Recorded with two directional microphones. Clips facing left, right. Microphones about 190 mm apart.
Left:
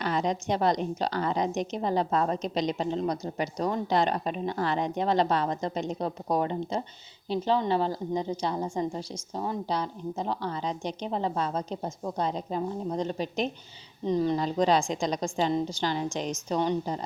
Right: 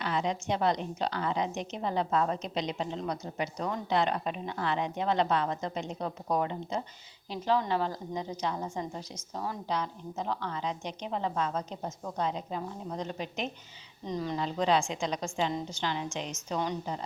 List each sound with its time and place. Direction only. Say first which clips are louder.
0.0 s a woman's voice: left 3 dB; 40° left (ahead or behind)